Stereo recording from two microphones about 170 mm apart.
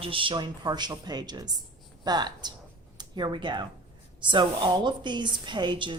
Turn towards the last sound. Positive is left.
turn(degrees=-30)  # may be behind; listen again after turning